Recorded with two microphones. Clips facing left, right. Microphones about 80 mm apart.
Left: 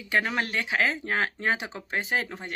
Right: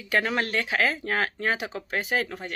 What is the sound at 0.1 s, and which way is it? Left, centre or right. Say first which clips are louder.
Speech: right 1 dB; centre.